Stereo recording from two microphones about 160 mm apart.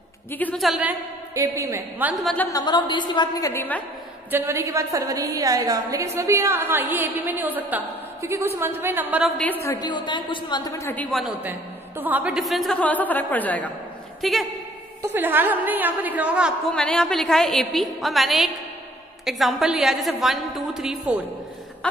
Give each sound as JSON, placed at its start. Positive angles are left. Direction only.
{"t": 0.3, "sound": "a woman's voice", "side_deg": 10}
{"t": 0.6, "sound": "a woman's voice", "side_deg": -5}
{"t": 1.3, "sound": "a woman's voice", "side_deg": -20}
{"t": 2.1, "sound": "a woman's voice", "side_deg": 0}
{"t": 2.5, "sound": "a woman's voice", "side_deg": 25}
{"t": 4.3, "sound": "a woman's voice", "side_deg": -15}
{"t": 9.4, "sound": "a woman's voice", "side_deg": 15}
{"t": 11.1, "sound": "a woman's voice", "side_deg": 0}
{"t": 15.0, "sound": "a woman's voice", "side_deg": -15}
{"t": 16.7, "sound": "a woman's voice", "side_deg": 5}